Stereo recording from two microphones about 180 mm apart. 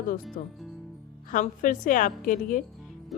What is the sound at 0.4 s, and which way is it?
A woman's voice, 50° left (ahead or behind).